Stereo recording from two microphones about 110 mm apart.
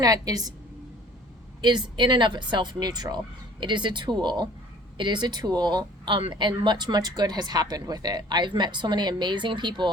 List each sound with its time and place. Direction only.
0.0 s speech: 35° right (ahead or behind)
1.6 s a woman's voice: 45° right (ahead or behind)